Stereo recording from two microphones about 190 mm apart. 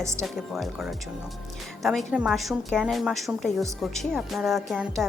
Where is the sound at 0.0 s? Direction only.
15° right (ahead or behind).